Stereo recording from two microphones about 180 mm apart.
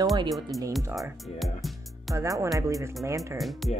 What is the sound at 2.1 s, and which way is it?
Speech, 15° right (ahead or behind).